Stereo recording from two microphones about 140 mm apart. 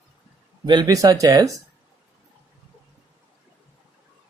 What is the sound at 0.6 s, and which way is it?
Speech, 30° right (ahead or behind).